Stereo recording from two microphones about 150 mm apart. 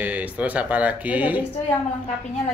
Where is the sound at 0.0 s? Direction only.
10° right (ahead or behind).